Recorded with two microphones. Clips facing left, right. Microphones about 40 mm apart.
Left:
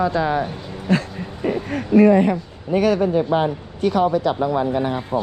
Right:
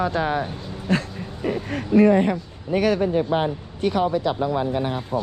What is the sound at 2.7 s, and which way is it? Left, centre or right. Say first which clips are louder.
Speech: left 3 dB; left.